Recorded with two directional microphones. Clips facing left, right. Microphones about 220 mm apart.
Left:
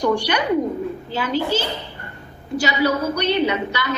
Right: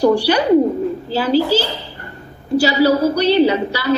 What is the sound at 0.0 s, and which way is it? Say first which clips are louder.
A woman's voice: right 6 dB; 35° right (ahead or behind).